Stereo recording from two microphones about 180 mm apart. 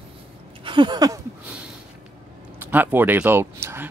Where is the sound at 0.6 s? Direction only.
25° right (ahead or behind).